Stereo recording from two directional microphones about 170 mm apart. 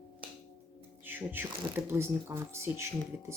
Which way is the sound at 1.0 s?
10° right (ahead or behind).